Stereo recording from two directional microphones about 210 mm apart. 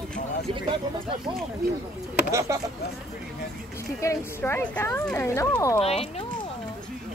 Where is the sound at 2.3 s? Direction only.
15° right (ahead or behind).